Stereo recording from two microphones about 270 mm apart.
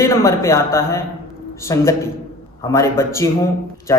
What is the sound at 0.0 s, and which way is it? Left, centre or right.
Speech, centre.